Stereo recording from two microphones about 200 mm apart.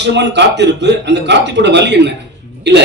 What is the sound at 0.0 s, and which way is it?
A man's voice, 60° right (ahead or behind).